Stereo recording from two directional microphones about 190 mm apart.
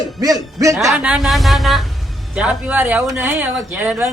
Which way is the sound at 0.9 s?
5° right (ahead or behind).